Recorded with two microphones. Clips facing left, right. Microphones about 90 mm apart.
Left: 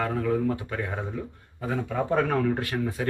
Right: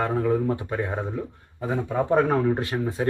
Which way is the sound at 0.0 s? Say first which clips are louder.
Right 3 dB; 25° right (ahead or behind).